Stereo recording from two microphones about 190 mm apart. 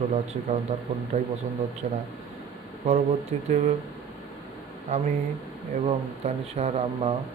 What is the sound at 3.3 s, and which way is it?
Speech, 35° right (ahead or behind).